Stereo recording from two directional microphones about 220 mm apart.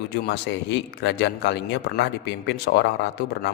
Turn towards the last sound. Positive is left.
turn(degrees=50)  # may be behind; listen again after turning